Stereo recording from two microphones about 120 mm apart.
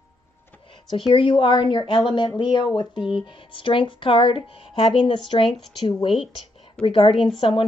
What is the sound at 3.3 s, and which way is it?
Speech, 45° left (ahead or behind).